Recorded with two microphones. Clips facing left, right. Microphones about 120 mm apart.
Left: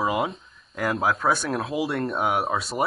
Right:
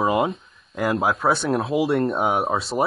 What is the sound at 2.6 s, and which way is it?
Speech, 25° right (ahead or behind).